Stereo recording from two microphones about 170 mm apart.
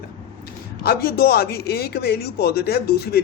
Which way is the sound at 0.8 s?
65° left (ahead or behind).